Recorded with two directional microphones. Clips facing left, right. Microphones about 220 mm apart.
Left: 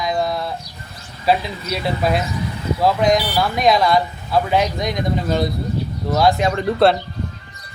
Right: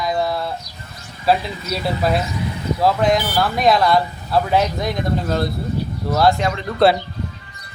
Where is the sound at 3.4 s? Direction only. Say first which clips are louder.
Even; centre (ahead or behind).